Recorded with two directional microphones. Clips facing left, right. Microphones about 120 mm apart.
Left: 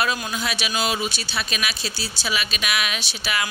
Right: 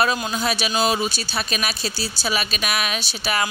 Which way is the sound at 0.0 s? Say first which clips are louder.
Right 3 dB; 40° right (ahead or behind).